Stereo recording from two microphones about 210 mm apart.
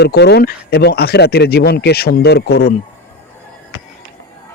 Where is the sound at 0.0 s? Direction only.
50° left (ahead or behind).